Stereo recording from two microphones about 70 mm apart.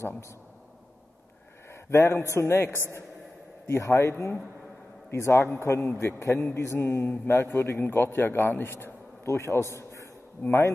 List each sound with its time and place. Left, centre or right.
1.7 s a man's voice: left
5.1 s a man's voice: left
10.4 s speech: left